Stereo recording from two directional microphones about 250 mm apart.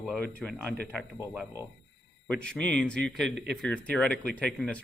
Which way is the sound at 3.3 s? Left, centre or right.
Right.